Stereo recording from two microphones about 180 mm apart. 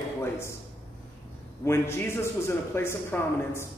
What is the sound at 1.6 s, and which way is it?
Speech, 15° left (ahead or behind).